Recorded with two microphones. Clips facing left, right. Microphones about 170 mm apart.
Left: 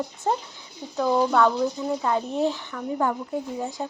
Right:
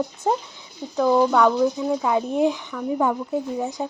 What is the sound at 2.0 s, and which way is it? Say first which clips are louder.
Speech: right 3 dB; 15° right (ahead or behind).